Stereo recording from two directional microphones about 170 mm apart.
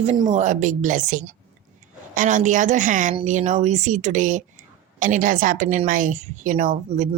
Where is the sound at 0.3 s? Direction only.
45° right (ahead or behind).